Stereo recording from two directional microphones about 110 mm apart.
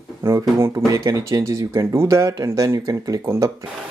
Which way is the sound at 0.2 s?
25° right (ahead or behind).